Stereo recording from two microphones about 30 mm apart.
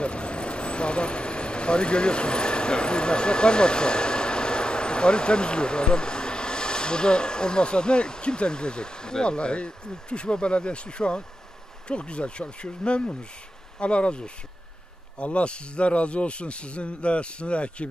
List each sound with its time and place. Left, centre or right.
0.0 s vehicle: left
8.4 s speech: left